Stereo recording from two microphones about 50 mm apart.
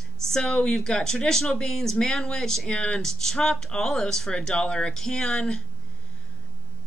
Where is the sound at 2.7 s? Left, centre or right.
Centre.